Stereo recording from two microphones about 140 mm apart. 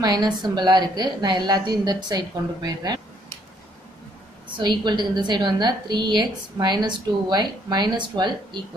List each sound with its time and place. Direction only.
0.0 s a woman's voice: 30° right (ahead or behind)
4.6 s a woman's voice: 30° right (ahead or behind)